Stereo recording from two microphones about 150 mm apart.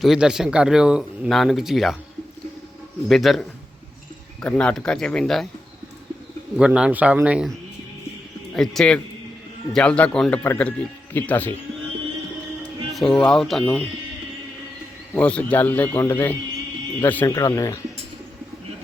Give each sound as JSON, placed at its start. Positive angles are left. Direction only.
{"t": 0.0, "sound": "speech", "side_deg": -5}
{"t": 3.1, "sound": "speech", "side_deg": 0}
{"t": 6.6, "sound": "a man's voice", "side_deg": -5}
{"t": 8.5, "sound": "a man's voice", "side_deg": 5}
{"t": 12.9, "sound": "speech", "side_deg": 0}
{"t": 15.1, "sound": "a man's voice", "side_deg": 10}
{"t": 17.2, "sound": "speech", "side_deg": 25}